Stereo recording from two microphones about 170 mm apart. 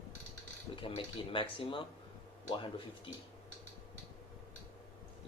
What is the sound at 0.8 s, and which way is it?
Speech, 30° left (ahead or behind).